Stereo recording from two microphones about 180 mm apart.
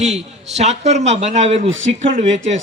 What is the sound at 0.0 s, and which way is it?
A man's voice, 40° right (ahead or behind).